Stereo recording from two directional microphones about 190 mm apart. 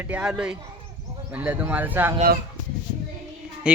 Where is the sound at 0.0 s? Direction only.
5° right (ahead or behind).